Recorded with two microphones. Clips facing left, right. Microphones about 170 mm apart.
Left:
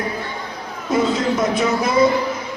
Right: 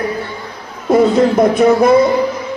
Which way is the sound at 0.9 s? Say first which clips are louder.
Right 8 dB; 60° right (ahead or behind).